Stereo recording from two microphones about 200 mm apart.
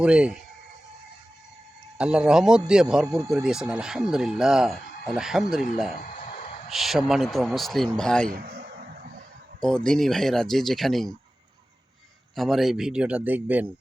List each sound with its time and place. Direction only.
0.0 s speech: 5° right (ahead or behind)
2.0 s speech: 5° right (ahead or behind)
6.0 s a sound: 40° left (ahead or behind)
6.7 s speech: centre (ahead or behind)
8.3 s a man's voice: 50° right (ahead or behind)
9.6 s speech: 5° left (ahead or behind)
12.4 s speech: centre (ahead or behind)